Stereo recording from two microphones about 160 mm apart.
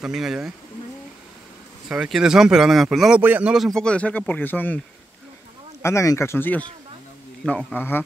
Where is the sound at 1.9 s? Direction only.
5° right (ahead or behind).